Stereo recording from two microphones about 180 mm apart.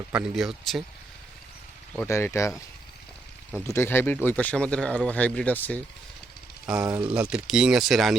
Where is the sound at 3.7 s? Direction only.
15° left (ahead or behind).